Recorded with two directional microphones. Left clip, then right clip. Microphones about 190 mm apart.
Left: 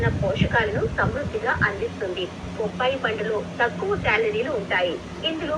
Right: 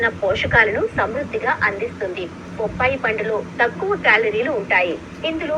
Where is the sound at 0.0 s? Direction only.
25° right (ahead or behind).